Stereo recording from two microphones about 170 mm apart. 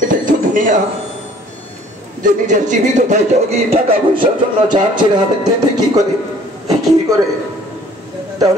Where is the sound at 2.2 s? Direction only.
50° right (ahead or behind).